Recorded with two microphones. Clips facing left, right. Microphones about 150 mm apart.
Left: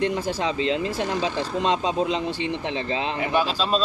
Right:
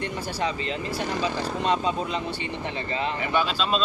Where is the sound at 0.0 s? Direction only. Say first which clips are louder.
Left 4 dB; 90° left.